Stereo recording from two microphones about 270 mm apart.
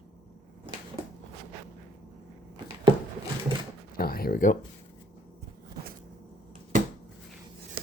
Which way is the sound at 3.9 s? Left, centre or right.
Left.